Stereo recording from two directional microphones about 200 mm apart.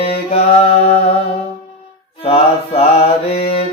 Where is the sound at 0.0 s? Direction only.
30° left (ahead or behind).